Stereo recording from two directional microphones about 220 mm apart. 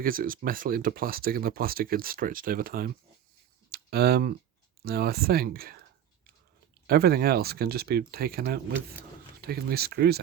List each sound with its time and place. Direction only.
0.0 s speech: 40° right (ahead or behind)
3.7 s typing: 45° right (ahead or behind)
4.9 s speech: 45° right (ahead or behind)
6.8 s speech: 45° right (ahead or behind)